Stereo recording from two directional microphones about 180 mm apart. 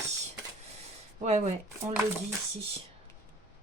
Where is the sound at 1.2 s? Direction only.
35° right (ahead or behind).